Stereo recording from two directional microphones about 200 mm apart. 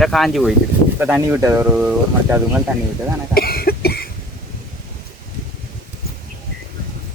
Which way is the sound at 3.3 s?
50° left (ahead or behind).